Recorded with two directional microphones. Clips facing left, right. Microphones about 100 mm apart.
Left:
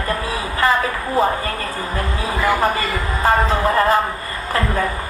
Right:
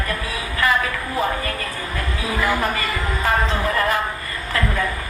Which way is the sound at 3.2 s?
35° left (ahead or behind).